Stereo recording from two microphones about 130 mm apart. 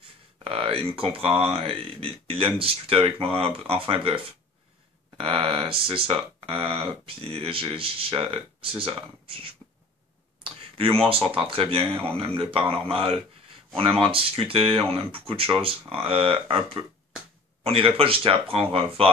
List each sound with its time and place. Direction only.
0.4 s speech: 45° right (ahead or behind)